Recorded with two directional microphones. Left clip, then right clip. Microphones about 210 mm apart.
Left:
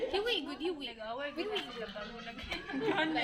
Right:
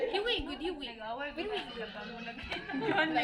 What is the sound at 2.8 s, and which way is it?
Chatter, 40° left (ahead or behind).